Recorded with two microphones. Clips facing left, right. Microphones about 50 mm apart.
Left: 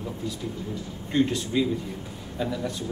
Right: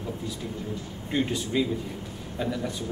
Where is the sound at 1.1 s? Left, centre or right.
Centre.